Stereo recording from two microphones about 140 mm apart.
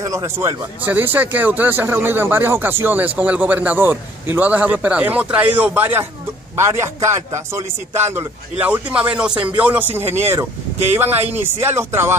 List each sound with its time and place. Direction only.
0.0 s a man's voice: 25° right (ahead or behind)